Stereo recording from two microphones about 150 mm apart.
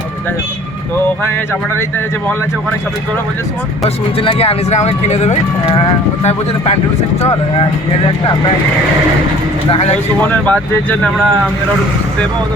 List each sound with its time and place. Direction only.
3.8 s speech: 40° left (ahead or behind)
10.2 s speech: 10° left (ahead or behind)